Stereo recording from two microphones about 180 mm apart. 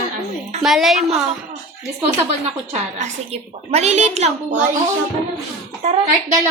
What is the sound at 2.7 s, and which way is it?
A woman's voice, 40° right (ahead or behind).